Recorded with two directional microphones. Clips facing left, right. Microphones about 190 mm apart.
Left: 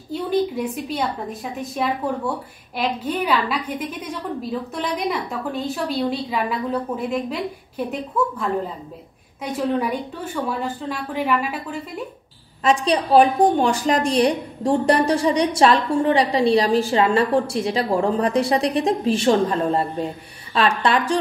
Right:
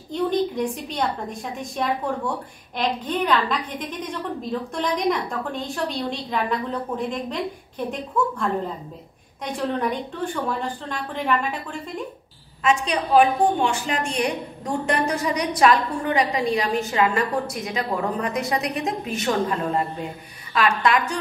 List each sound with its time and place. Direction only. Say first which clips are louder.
0.1 s a woman's voice: left 1 dB; 5° left (ahead or behind)
12.6 s a woman's voice: left 3 dB; 35° left (ahead or behind)